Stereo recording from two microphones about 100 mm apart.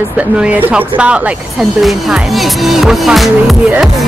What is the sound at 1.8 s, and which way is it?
Music, centre (ahead or behind).